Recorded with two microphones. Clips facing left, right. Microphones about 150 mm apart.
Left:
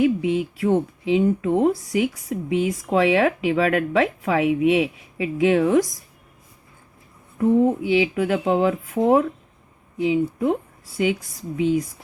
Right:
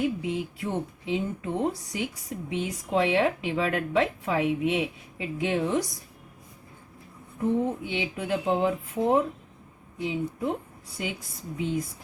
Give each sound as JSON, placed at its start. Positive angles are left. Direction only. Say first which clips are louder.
{"t": 0.0, "sound": "speech", "louder": "left 8 dB", "side_deg": 85}
{"t": 7.3, "sound": "speech", "louder": "left 8 dB", "side_deg": 90}